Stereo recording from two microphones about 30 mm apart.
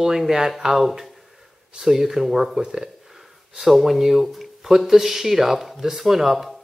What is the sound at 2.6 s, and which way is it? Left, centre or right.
Speech, right.